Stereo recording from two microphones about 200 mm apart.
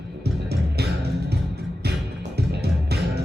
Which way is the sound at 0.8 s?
55° right (ahead or behind).